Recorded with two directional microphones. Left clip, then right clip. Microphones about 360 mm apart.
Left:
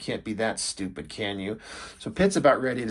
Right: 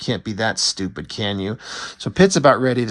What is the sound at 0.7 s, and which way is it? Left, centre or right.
Speech, right.